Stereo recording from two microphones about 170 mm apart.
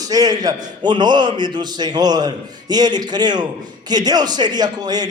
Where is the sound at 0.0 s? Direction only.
20° right (ahead or behind).